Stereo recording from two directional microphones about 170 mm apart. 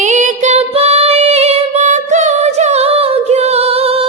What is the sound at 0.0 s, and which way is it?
Female singing, 45° right (ahead or behind).